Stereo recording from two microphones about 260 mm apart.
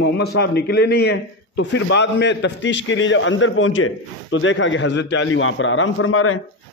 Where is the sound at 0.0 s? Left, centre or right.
Left.